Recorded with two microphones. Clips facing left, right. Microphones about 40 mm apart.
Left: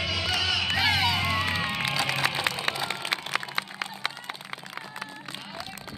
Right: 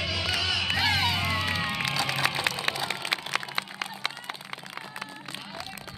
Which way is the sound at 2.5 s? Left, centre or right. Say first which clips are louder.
Even; left.